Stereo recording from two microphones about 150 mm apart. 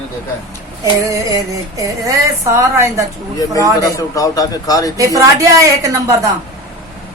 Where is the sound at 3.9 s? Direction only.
20° left (ahead or behind).